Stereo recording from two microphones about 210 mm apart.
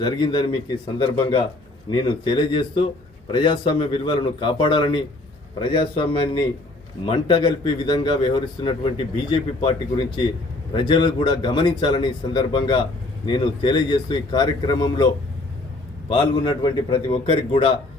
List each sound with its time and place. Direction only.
0.0 s a man's voice: 20° left (ahead or behind)